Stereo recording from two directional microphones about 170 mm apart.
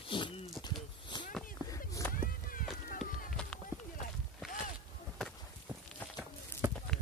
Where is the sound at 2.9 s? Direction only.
55° left (ahead or behind).